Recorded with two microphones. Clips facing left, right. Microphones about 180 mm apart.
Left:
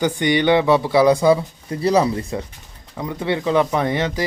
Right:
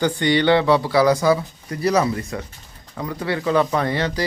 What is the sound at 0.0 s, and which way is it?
Speech, 20° left (ahead or behind).